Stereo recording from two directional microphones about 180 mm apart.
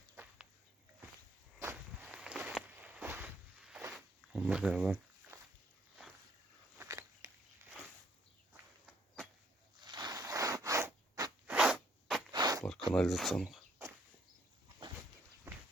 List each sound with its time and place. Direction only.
1.5 s walk: 10° right (ahead or behind)
6.7 s biting: 15° right (ahead or behind)
9.8 s a sound: 20° right (ahead or behind)
11.4 s zipper: 5° right (ahead or behind)
12.3 s a sound: 20° right (ahead or behind)
12.9 s speech: centre (ahead or behind)
15.5 s walk: 15° right (ahead or behind)